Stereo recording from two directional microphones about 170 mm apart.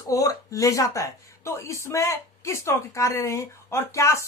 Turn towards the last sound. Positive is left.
turn(degrees=15)  # may be behind; listen again after turning